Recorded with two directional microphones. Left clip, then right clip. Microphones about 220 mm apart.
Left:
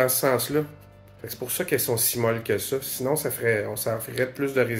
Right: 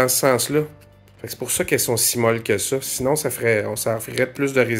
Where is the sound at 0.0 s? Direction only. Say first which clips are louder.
Right 4 dB; 40° right (ahead or behind).